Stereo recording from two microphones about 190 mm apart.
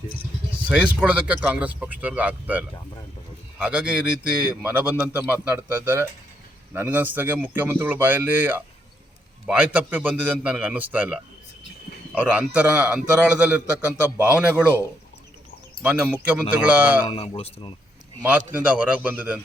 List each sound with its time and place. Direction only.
0.7 s a man's voice: 5° right (ahead or behind)
16.2 s a man's voice: 10° right (ahead or behind)
17.1 s speech: 30° left (ahead or behind)
18.2 s a man's voice: 10° right (ahead or behind)